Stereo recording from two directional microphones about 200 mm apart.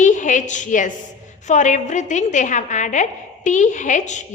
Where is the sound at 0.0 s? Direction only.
40° left (ahead or behind).